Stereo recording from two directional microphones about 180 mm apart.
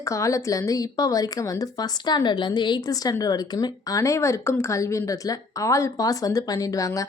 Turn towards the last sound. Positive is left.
turn(degrees=20)  # may be behind; listen again after turning